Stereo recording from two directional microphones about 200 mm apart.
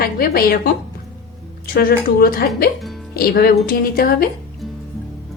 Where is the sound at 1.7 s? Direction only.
50° left (ahead or behind).